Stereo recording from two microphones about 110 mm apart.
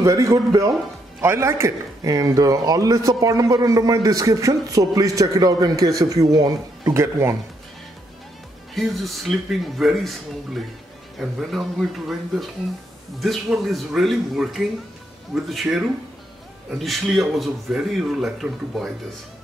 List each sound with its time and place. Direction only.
0.0 s a man's voice: 30° right (ahead or behind)
8.7 s speech: centre (ahead or behind)
13.2 s speech: centre (ahead or behind)